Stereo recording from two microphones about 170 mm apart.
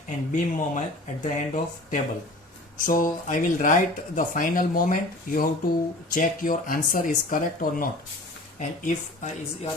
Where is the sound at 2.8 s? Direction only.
50° left (ahead or behind).